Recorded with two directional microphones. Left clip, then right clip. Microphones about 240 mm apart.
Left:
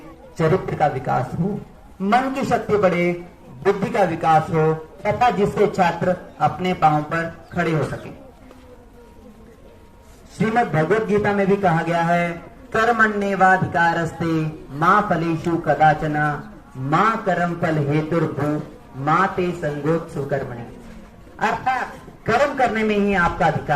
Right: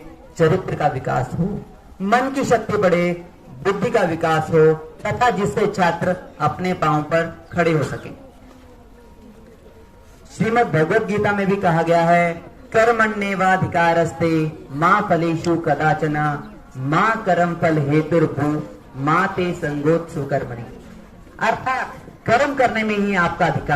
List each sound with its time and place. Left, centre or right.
0.3 s a man's voice: right
10.3 s a man's voice: right